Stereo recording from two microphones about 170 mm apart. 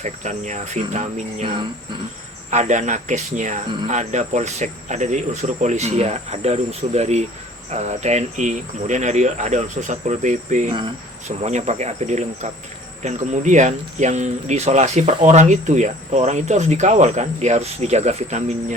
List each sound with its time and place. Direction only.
0.0 s speech: 45° right (ahead or behind)
2.5 s speech: 45° right (ahead or behind)
11.3 s cricket: 40° right (ahead or behind)
13.0 s speech: 45° right (ahead or behind)